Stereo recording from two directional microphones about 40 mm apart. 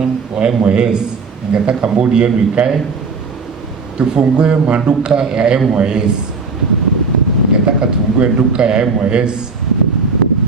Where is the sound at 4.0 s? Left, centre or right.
Right.